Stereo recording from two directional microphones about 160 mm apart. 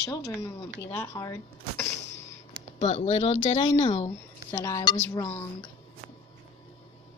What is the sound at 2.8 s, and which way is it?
Speech, 45° left (ahead or behind).